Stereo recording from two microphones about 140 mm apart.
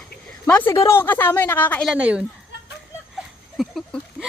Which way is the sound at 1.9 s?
10° right (ahead or behind).